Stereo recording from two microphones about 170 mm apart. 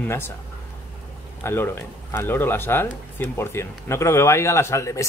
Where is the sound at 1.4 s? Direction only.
15° left (ahead or behind).